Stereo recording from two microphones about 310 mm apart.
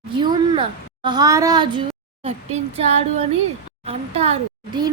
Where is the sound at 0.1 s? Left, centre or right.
Centre.